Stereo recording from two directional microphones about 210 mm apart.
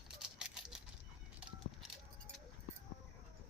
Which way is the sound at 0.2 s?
5° right (ahead or behind).